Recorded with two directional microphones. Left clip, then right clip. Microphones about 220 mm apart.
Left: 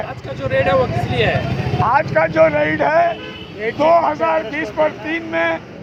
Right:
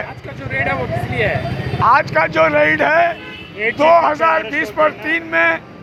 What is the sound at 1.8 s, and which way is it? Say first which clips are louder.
Speech: right 2 dB; 55° right (ahead or behind).